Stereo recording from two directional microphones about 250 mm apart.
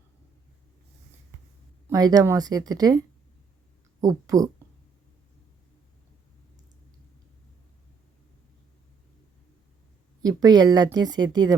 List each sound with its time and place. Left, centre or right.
1.9 s speech: centre
4.0 s speech: centre
10.2 s speech: centre